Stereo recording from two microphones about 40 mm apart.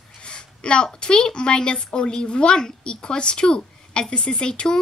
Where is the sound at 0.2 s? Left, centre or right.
Left.